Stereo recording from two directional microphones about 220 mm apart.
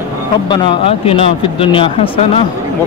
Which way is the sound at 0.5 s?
25° left (ahead or behind).